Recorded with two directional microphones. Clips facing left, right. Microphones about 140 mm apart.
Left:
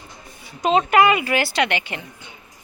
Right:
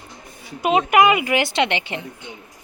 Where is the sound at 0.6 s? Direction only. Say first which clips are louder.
Even; 10° right (ahead or behind).